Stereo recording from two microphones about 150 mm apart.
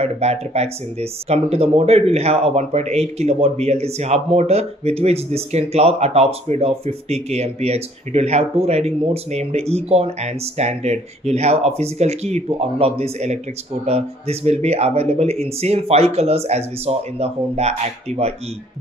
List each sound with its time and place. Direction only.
0.0 s speech: 45° right (ahead or behind)